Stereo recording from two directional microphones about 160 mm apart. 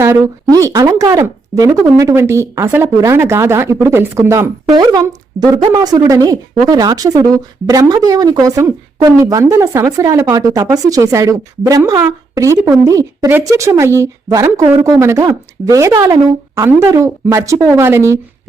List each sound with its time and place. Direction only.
0.0 s speech: 20° right (ahead or behind)